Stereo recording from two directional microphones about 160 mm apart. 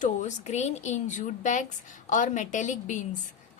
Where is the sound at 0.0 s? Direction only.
50° left (ahead or behind).